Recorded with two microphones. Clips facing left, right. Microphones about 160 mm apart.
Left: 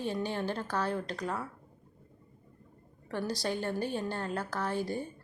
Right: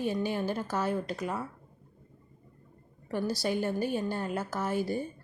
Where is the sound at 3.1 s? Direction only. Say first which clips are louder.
Right 3 dB; 10° right (ahead or behind).